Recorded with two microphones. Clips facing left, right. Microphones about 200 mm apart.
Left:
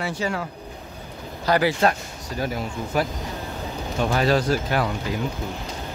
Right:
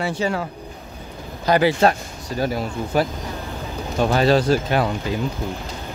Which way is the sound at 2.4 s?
30° right (ahead or behind).